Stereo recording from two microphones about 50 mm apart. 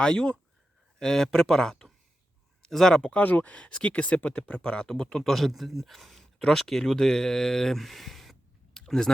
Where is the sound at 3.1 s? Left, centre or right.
Left.